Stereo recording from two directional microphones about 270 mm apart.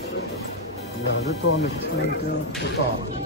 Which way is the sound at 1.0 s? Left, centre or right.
Left.